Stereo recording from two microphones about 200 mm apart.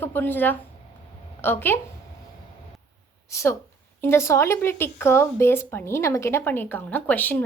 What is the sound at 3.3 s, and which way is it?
A woman's voice, 15° left (ahead or behind).